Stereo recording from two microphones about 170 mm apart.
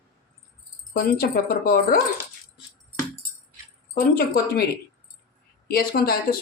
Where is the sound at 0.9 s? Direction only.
60° left (ahead or behind).